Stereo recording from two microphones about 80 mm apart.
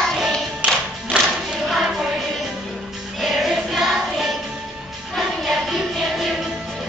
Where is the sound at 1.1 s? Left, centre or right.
Centre.